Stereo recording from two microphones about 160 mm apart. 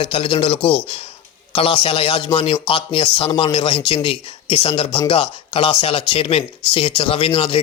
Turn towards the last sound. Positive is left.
turn(degrees=35)  # may be behind; listen again after turning